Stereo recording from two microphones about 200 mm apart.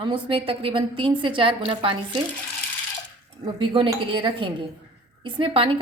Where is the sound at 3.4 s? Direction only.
25° right (ahead or behind).